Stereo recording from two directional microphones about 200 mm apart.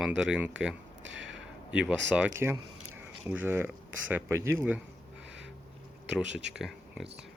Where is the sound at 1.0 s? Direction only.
65° right (ahead or behind).